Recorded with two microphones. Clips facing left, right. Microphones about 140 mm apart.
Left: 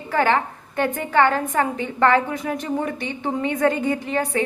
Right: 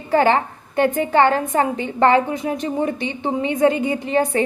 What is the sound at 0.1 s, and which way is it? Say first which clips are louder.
A woman's voice: right 4 dB; 30° right (ahead or behind).